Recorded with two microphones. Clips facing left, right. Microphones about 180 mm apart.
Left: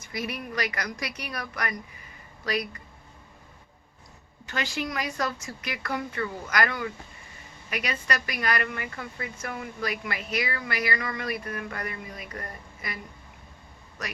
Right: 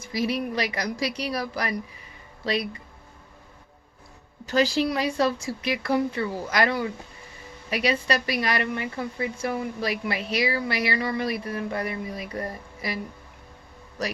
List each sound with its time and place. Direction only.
0.0 s speech: 30° right (ahead or behind)
4.4 s speech: 35° right (ahead or behind)